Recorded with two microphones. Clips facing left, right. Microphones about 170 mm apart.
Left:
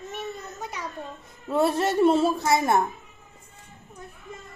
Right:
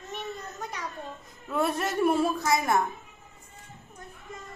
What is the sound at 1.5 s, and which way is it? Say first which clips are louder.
A woman's voice: left 5 dB; 30° left (ahead or behind).